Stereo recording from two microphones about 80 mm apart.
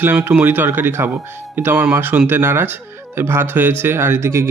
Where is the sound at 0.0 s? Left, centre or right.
Right.